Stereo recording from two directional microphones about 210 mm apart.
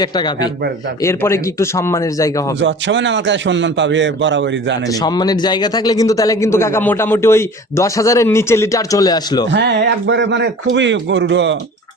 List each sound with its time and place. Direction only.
1.0 s a man's voice: 15° left (ahead or behind)
2.6 s a man's voice: 60° right (ahead or behind)
4.9 s a man's voice: 20° left (ahead or behind)
9.5 s a man's voice: 55° right (ahead or behind)